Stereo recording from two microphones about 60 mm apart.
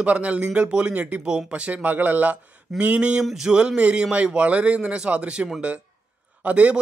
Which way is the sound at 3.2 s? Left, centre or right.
Centre.